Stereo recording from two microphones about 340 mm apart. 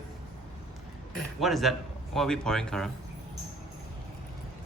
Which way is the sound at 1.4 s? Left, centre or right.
Centre.